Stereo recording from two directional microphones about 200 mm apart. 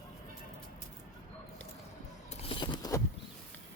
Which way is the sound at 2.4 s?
25° left (ahead or behind).